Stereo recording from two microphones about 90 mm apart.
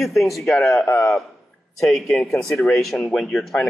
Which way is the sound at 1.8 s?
Centre (ahead or behind).